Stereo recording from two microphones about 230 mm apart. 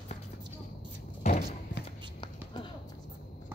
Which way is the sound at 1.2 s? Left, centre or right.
Left.